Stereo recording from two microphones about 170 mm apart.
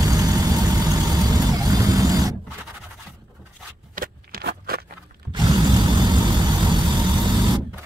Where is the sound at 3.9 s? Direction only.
60° right (ahead or behind).